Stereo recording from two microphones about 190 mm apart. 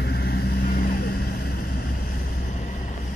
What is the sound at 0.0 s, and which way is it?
Vehicle, 60° left (ahead or behind).